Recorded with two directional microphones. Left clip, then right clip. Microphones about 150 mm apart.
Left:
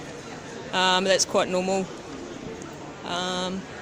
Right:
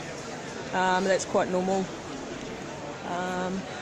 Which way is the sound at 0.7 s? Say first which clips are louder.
Left 3 dB; 10° left (ahead or behind).